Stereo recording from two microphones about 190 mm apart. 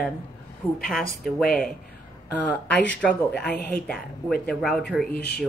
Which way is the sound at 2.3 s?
10° left (ahead or behind).